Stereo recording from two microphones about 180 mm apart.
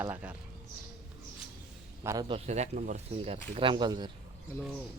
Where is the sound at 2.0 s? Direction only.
20° right (ahead or behind).